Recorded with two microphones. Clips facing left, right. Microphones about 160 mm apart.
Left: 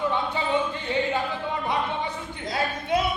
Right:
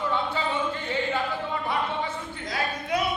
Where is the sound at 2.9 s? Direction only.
25° left (ahead or behind).